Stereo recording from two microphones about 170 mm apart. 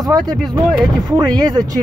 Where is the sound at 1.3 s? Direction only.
25° right (ahead or behind).